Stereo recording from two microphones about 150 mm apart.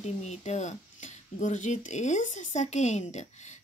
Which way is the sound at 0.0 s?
45° left (ahead or behind).